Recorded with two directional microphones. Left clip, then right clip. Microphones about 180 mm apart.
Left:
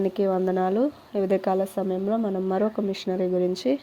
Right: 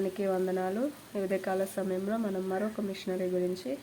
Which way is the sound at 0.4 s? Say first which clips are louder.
Left 8 dB; 40° left (ahead or behind).